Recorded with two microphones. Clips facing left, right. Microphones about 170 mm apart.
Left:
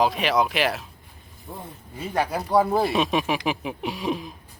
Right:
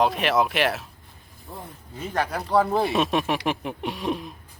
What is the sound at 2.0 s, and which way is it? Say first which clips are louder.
Speech: left 2 dB; 10° left (ahead or behind).